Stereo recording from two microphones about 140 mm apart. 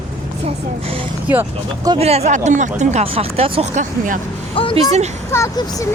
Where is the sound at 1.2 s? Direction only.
15° right (ahead or behind).